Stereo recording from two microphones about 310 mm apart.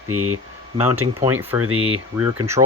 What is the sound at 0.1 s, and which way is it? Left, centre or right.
Speech, right.